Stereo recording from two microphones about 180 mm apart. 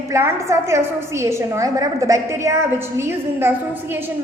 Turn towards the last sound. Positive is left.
turn(degrees=-15)  # may be behind; listen again after turning